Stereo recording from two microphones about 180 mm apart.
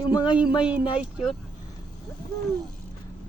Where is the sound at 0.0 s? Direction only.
25° left (ahead or behind).